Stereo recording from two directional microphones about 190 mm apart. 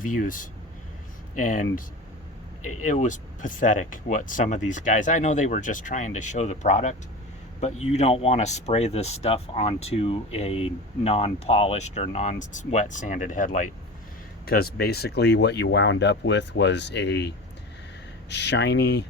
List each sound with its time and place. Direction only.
0.0 s speech: 45° left (ahead or behind)
2.8 s speech: 40° left (ahead or behind)
14.4 s speech: 55° left (ahead or behind)